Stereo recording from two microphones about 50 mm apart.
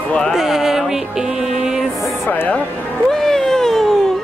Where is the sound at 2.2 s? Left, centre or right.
Left.